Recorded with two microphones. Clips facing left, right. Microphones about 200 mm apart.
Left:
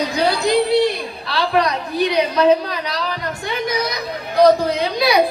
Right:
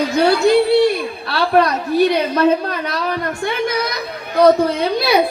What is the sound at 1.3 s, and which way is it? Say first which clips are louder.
A woman's voice: right 3 dB; 50° right (ahead or behind).